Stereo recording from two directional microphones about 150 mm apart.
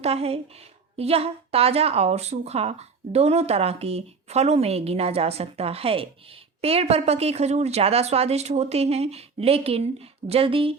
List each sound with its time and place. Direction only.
0.0 s speech: 40° right (ahead or behind)